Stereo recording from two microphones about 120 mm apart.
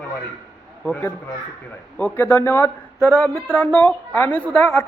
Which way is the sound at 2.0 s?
20° left (ahead or behind).